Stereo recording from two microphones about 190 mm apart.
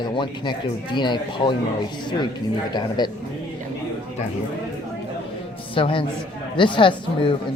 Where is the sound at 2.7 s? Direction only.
20° left (ahead or behind).